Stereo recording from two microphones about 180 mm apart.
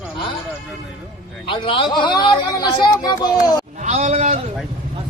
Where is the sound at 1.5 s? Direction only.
30° left (ahead or behind).